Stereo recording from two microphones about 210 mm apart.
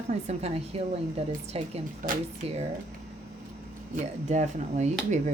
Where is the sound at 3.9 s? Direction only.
35° right (ahead or behind).